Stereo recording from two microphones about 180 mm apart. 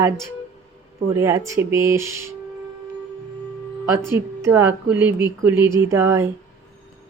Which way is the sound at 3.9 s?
15° right (ahead or behind).